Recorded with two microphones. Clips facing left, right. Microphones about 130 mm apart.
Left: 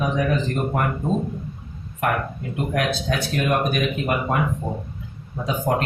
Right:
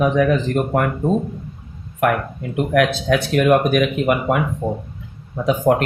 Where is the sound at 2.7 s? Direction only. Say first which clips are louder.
Right 8 dB; 70° right (ahead or behind).